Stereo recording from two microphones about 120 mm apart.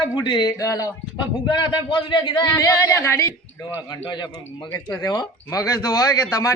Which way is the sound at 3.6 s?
35° left (ahead or behind).